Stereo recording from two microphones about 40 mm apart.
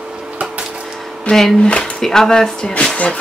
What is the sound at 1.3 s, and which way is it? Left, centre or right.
Speech, left.